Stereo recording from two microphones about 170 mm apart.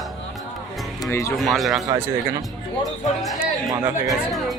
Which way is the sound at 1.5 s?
Centre (ahead or behind).